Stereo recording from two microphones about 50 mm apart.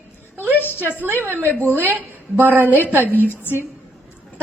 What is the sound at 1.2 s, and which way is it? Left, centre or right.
A woman's voice, right.